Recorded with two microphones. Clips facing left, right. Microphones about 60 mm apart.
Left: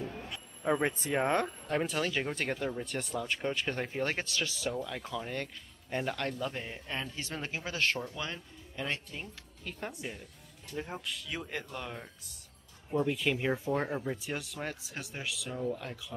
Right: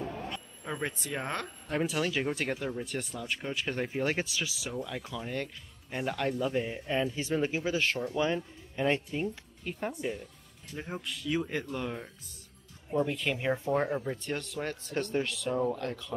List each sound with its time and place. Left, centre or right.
0.7 s speech: left
1.7 s speech: centre
8.1 s speech: centre
9.8 s speech: centre